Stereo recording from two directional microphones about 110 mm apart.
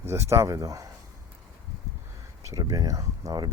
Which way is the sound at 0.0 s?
25° right (ahead or behind).